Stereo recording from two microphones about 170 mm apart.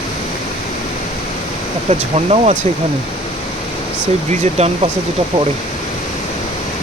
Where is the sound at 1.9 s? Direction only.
40° right (ahead or behind).